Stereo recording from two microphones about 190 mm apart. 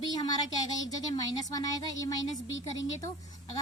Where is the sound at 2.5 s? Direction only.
80° left.